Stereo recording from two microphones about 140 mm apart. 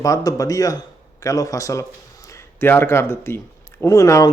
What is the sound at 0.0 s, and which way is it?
A man's voice, 25° left (ahead or behind).